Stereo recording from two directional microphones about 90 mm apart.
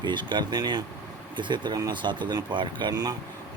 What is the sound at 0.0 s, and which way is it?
Speech, 60° right (ahead or behind).